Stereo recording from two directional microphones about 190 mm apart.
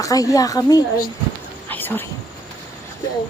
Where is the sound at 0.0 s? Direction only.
20° left (ahead or behind).